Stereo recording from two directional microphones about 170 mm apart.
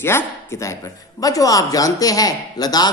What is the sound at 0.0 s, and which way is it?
Speech, 15° left (ahead or behind).